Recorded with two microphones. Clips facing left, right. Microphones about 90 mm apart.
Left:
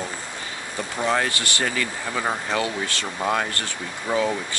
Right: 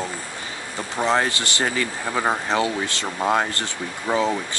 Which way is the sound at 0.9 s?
20° right (ahead or behind).